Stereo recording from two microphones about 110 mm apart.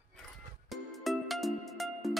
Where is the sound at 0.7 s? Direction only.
Centre (ahead or behind).